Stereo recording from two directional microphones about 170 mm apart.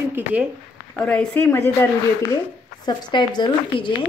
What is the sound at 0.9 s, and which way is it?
Speech, 5° left (ahead or behind).